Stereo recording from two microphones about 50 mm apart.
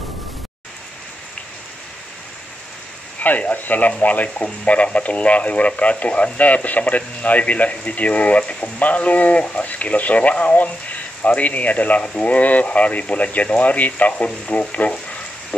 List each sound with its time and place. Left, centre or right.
3.2 s speech: left
14.1 s speech: left